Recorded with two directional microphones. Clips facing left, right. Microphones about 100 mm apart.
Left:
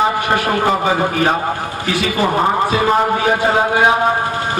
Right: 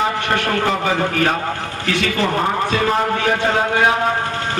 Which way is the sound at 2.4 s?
35° left (ahead or behind).